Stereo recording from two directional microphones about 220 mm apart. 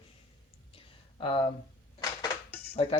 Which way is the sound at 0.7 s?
25° left (ahead or behind).